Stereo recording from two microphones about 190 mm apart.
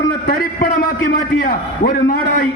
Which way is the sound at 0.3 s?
50° left (ahead or behind).